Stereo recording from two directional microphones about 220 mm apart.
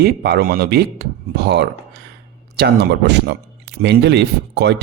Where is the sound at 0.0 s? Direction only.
45° right (ahead or behind).